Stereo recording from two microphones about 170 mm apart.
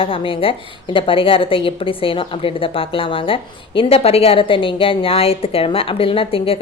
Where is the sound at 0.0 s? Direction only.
30° left (ahead or behind).